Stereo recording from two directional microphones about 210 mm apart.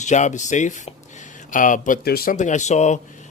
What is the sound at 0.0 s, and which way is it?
Speech, 35° left (ahead or behind).